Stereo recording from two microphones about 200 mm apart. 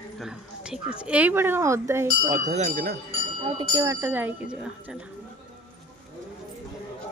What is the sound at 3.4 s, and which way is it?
Speech, 20° right (ahead or behind).